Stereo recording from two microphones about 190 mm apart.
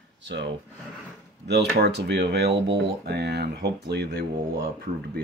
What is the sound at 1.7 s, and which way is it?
Speech, 60° right (ahead or behind).